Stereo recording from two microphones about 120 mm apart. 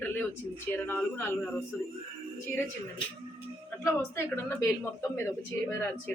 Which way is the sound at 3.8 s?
20° left (ahead or behind).